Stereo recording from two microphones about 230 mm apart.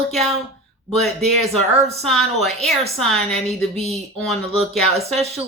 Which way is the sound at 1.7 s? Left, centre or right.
Right.